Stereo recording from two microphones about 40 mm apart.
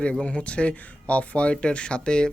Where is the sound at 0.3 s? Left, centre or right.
Left.